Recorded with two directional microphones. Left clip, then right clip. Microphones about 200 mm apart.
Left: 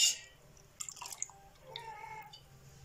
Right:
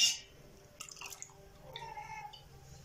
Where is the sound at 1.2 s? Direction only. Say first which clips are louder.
Left 7 dB; 20° right (ahead or behind).